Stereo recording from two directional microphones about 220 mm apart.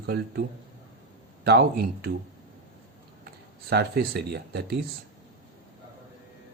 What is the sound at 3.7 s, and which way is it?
Speech, 45° right (ahead or behind).